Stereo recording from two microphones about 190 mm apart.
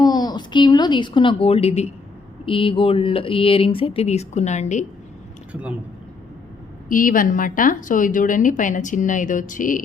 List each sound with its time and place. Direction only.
0.0 s a woman's voice: 20° left (ahead or behind); by 4.9 s 40° left (ahead or behind)
5.5 s speech: 5° right (ahead or behind)
6.8 s speech: 45° left (ahead or behind)